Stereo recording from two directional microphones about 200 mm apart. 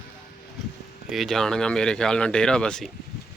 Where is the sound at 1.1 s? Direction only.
Centre (ahead or behind).